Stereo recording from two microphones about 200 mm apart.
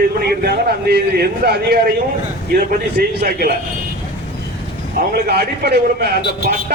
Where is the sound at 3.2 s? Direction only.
50° right (ahead or behind).